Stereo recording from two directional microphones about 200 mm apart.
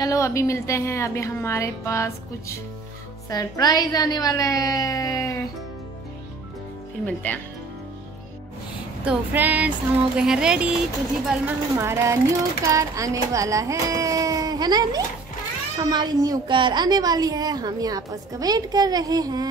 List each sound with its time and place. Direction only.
0.0 s a woman's voice: 15° left (ahead or behind)
7.3 s a woman's voice: 10° left (ahead or behind)
9.0 s a woman's voice: 10° right (ahead or behind)